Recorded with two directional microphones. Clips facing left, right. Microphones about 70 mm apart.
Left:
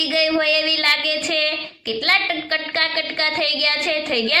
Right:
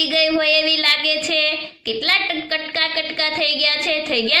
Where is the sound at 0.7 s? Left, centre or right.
Left.